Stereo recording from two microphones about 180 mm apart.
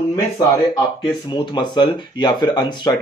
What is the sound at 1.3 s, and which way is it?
Speech, 25° left (ahead or behind).